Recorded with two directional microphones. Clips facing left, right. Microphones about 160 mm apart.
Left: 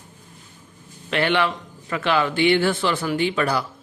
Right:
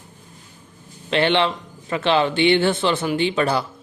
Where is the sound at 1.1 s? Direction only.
25° right (ahead or behind).